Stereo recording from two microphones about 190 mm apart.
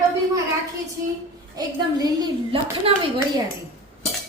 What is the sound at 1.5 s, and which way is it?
Speech, 20° right (ahead or behind).